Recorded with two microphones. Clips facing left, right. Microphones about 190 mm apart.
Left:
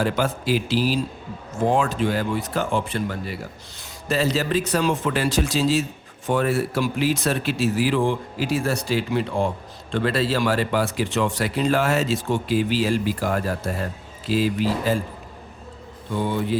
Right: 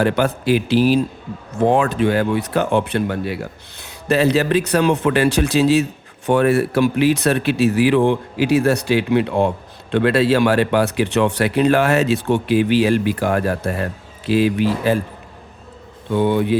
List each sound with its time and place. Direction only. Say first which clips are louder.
0.0 s speech: right 5 dB; 65° right (ahead or behind)
16.0 s speech: right 7 dB; 65° right (ahead or behind)